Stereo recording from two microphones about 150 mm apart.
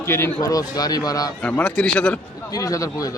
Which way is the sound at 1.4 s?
10° left (ahead or behind).